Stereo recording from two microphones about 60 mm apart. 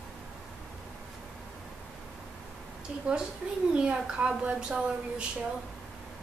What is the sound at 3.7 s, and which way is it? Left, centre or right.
A woman's voice, centre.